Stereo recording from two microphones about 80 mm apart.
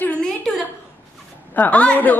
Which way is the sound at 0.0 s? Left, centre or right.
Centre.